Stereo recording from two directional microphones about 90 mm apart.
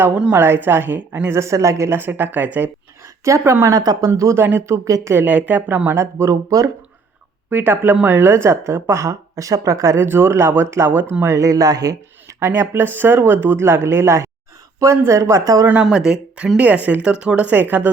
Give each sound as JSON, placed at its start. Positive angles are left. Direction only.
{"t": 0.1, "sound": "speech", "side_deg": -10}
{"t": 0.3, "sound": "a woman's voice", "side_deg": -25}
{"t": 1.4, "sound": "a woman's voice", "side_deg": -35}
{"t": 3.2, "sound": "speech", "side_deg": -35}
{"t": 3.8, "sound": "speech", "side_deg": -45}
{"t": 4.1, "sound": "speech", "side_deg": -30}
{"t": 5.1, "sound": "a woman's voice", "side_deg": -20}
{"t": 6.0, "sound": "speech", "side_deg": -35}
{"t": 7.5, "sound": "a woman's voice", "side_deg": -25}
{"t": 11.3, "sound": "speech", "side_deg": -40}
{"t": 12.4, "sound": "a woman's voice", "side_deg": -30}
{"t": 15.8, "sound": "speech", "side_deg": -5}